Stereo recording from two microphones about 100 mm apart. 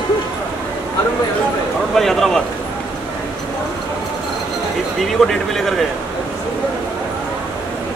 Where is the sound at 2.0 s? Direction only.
5° left (ahead or behind).